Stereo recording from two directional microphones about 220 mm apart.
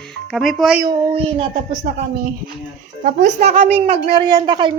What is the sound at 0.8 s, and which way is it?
Speech, 20° right (ahead or behind).